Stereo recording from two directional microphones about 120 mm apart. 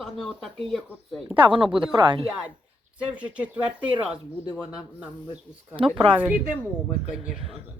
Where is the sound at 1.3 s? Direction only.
45° right (ahead or behind).